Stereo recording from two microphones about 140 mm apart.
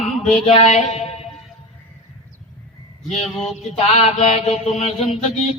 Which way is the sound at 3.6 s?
50° left (ahead or behind).